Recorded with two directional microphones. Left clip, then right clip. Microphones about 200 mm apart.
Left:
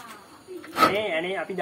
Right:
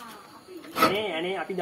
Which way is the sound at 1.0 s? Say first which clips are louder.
Left 2 dB; 15° left (ahead or behind).